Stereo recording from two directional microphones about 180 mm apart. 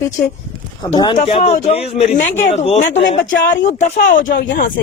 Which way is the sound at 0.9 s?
30° left (ahead or behind).